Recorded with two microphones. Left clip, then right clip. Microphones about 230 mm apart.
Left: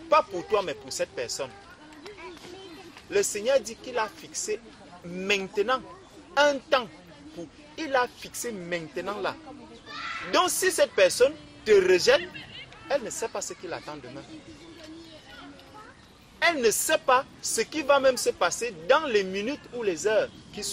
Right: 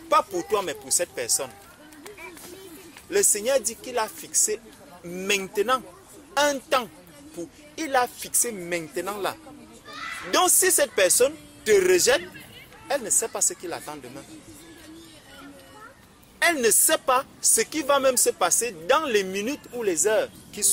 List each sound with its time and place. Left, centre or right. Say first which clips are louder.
0.1 s a woman's voice: right 1 dB; right
3.1 s a woman's voice: right 2 dB; right
16.3 s a woman's voice: right 2 dB; right